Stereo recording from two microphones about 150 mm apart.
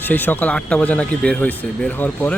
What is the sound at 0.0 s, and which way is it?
Speech, 10° left (ahead or behind).